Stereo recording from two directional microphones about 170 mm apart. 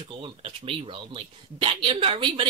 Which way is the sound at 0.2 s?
30° right (ahead or behind).